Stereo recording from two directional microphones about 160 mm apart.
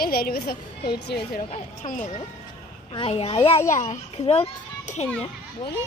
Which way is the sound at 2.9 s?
35° left (ahead or behind).